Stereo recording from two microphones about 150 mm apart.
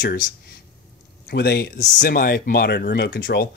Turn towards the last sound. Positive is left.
turn(degrees=90)